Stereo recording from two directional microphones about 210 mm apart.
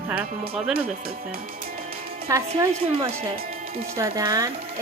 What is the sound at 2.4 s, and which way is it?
Speech, 25° right (ahead or behind).